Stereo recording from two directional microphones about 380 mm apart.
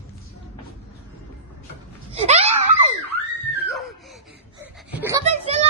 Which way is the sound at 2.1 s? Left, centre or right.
Centre.